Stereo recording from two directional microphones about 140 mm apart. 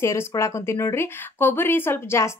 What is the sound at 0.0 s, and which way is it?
A woman's voice, 20° left (ahead or behind).